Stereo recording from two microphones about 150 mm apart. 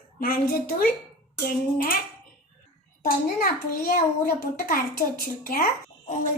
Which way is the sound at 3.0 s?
75° left (ahead or behind).